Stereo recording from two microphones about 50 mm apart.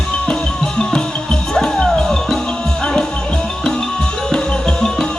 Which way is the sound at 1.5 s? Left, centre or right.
Centre.